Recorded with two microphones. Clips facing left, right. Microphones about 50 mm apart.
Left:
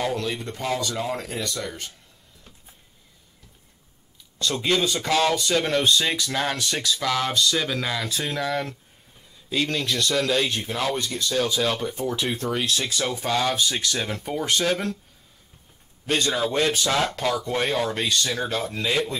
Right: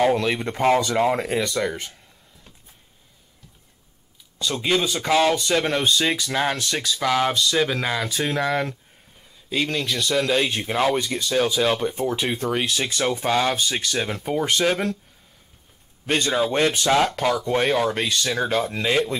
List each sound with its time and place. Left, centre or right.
0.0 s a sound: right
0.3 s speech: right
4.4 s speech: centre; by 8.7 s right
9.5 s speech: centre
16.1 s speech: right